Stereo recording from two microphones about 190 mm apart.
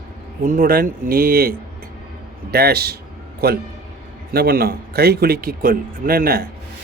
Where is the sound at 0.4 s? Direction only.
50° right (ahead or behind).